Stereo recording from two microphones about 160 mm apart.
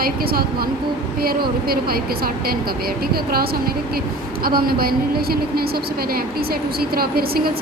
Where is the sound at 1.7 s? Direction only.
70° right (ahead or behind).